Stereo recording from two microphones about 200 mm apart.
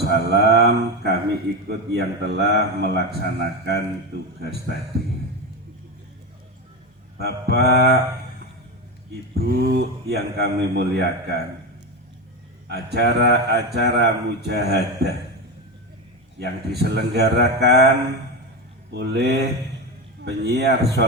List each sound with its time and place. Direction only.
0.0 s a man's voice: 55° right (ahead or behind)
5.0 s a sound: 50° right (ahead or behind)
7.2 s a man's voice: 55° right (ahead or behind)
9.3 s speech: 50° right (ahead or behind)
12.6 s a man's voice: 55° right (ahead or behind)
16.4 s speech: 55° right (ahead or behind)
18.9 s a man's voice: 55° right (ahead or behind)